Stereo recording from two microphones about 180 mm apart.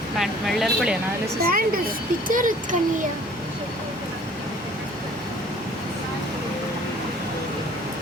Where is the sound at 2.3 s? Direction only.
45° right (ahead or behind).